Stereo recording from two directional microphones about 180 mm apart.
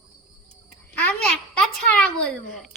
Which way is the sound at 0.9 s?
5° left (ahead or behind).